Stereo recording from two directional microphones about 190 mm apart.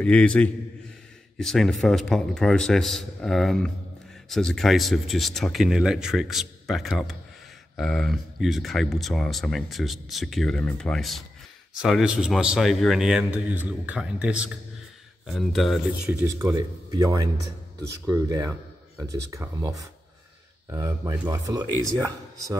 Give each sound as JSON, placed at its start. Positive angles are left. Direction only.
{"t": 0.0, "sound": "a man's voice", "side_deg": 5}